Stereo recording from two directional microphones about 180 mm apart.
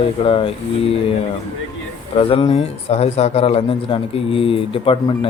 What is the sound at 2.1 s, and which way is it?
A man's voice, 30° left (ahead or behind).